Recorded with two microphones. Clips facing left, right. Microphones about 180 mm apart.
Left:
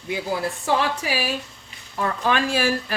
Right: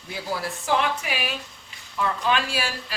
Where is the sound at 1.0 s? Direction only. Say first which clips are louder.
Left 4 dB; 40° left (ahead or behind).